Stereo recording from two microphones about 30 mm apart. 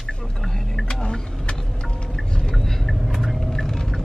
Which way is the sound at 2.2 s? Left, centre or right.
Left.